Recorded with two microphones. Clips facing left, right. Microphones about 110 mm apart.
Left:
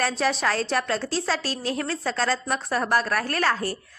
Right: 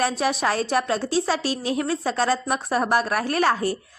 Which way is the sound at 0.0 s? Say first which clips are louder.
Right 2 dB; 15° right (ahead or behind).